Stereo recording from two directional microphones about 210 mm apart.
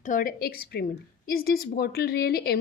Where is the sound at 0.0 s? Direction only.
40° left (ahead or behind).